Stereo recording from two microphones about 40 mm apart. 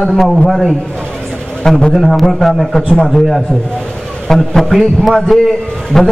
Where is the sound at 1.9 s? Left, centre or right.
Centre.